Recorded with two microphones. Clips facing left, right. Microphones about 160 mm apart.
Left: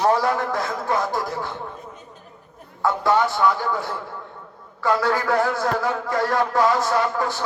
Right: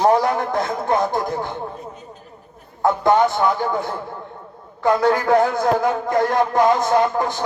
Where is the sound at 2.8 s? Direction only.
20° right (ahead or behind).